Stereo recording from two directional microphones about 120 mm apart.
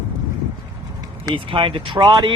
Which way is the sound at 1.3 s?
45° right (ahead or behind).